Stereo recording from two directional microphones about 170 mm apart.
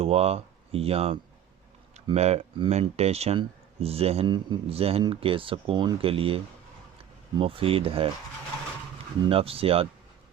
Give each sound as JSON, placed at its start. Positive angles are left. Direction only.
{"t": 0.0, "sound": "speech", "side_deg": -35}
{"t": 9.3, "sound": "speech", "side_deg": -35}